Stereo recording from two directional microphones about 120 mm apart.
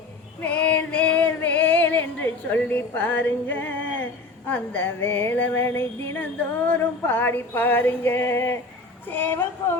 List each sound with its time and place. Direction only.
0.4 s female singing: 10° left (ahead or behind)
6.7 s music: 15° left (ahead or behind)